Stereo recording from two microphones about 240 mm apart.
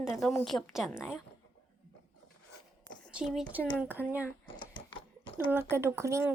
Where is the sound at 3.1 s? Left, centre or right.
Centre.